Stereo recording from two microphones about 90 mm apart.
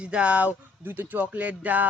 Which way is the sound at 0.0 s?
10° right (ahead or behind).